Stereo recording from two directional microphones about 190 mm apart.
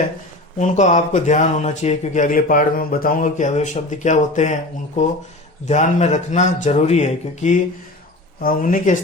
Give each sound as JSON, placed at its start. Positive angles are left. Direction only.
{"t": 0.6, "sound": "speech", "side_deg": 40}
{"t": 5.6, "sound": "speech", "side_deg": 35}